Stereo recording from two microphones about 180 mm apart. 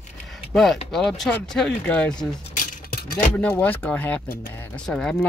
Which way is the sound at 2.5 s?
50° left (ahead or behind).